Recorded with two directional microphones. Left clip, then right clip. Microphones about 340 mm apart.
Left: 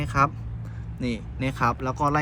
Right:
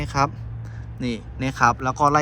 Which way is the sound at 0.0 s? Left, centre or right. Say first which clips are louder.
Even; centre.